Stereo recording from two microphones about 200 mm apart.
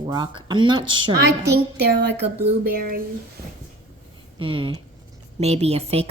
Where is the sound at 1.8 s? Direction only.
55° right (ahead or behind).